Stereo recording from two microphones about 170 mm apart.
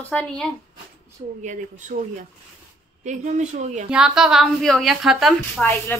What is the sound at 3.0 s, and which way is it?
Speech, 45° right (ahead or behind).